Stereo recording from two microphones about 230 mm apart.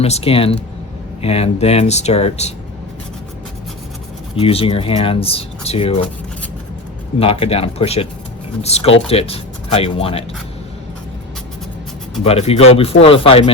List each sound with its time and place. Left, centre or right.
0.0 s speech: left
4.4 s speech: left
7.2 s speech: left
12.2 s speech: left